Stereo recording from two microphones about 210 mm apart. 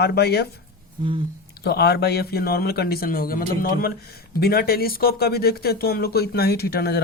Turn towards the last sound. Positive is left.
turn(degrees=50)  # may be behind; listen again after turning